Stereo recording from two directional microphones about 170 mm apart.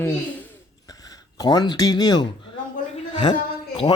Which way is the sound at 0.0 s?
10° left (ahead or behind).